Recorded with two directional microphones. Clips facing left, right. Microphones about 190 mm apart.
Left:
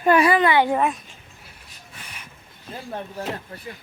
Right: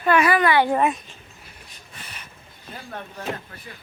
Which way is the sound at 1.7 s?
10° left (ahead or behind).